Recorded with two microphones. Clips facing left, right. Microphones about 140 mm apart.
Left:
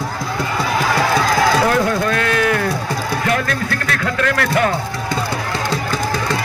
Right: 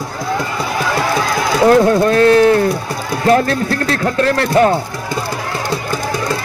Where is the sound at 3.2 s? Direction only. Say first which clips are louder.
Right 11 dB; 30° right (ahead or behind).